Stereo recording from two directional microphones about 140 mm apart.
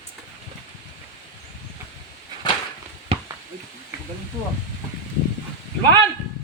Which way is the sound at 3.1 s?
40° right (ahead or behind).